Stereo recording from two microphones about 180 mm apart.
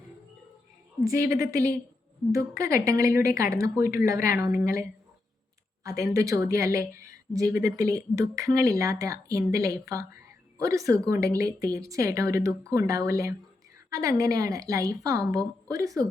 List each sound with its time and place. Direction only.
1.0 s a woman's voice: 15° right (ahead or behind)